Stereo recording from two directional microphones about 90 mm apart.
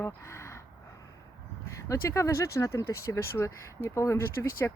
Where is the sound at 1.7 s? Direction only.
35° left (ahead or behind).